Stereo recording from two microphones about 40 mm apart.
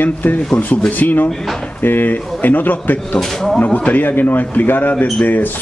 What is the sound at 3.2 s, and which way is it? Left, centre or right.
Speech, centre.